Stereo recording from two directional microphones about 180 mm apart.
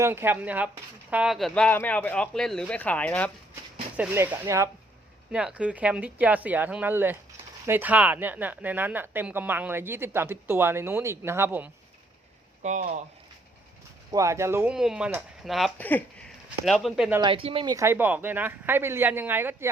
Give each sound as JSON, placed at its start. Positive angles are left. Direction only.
{"t": 0.0, "sound": "speech", "side_deg": -15}
{"t": 3.9, "sound": "speech", "side_deg": -10}
{"t": 5.3, "sound": "speech", "side_deg": -5}
{"t": 12.6, "sound": "speech", "side_deg": -45}
{"t": 14.1, "sound": "speech", "side_deg": -15}
{"t": 14.8, "sound": "speech", "side_deg": -5}
{"t": 17.2, "sound": "speech", "side_deg": -30}
{"t": 17.7, "sound": "speech", "side_deg": -10}